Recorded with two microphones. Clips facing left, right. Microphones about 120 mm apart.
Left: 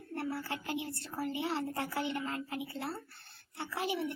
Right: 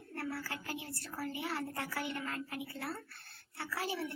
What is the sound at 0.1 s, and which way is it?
A child's voice, 25° left (ahead or behind).